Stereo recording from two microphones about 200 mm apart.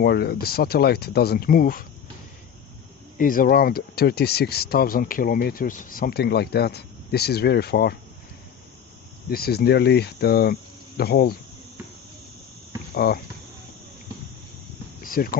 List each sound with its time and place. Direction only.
0.0 s speech: 55° left (ahead or behind)
3.2 s speech: 45° left (ahead or behind)
9.3 s speech: 50° left (ahead or behind)
12.9 s speech: 55° left (ahead or behind)
15.0 s speech: 45° left (ahead or behind)